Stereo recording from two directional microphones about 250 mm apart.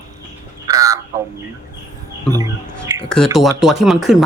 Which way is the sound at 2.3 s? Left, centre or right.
Centre.